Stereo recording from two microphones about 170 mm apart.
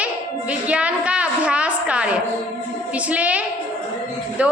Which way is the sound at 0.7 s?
5° right (ahead or behind).